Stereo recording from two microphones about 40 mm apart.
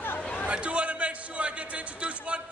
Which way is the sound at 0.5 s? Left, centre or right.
Right.